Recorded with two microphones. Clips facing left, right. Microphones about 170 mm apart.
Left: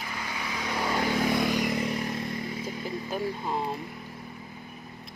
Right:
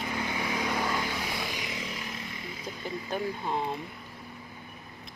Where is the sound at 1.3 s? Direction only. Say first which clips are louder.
Left 10 dB; 55° left (ahead or behind).